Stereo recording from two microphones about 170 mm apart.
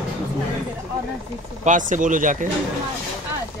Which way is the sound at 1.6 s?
50° right (ahead or behind).